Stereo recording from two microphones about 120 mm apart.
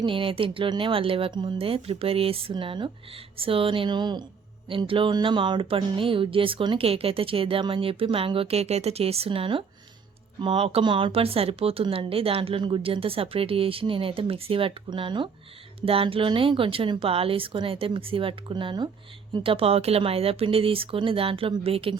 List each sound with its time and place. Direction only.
0.0 s speech: 45° right (ahead or behind)